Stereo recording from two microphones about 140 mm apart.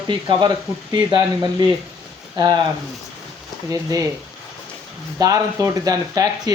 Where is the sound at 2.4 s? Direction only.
30° right (ahead or behind).